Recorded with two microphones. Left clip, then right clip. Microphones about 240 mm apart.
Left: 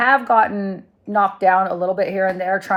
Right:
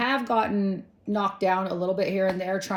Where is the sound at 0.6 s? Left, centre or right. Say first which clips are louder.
Left 3 dB; centre.